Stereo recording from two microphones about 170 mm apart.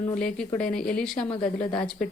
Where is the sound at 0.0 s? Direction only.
10° left (ahead or behind).